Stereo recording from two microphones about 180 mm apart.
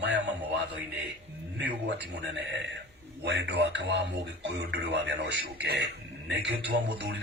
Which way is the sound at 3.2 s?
70° right (ahead or behind).